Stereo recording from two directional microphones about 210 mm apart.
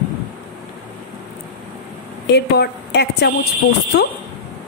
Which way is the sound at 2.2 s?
50° left (ahead or behind).